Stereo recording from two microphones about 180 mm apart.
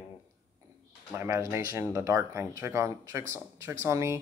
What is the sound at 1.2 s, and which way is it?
Speech, 15° right (ahead or behind).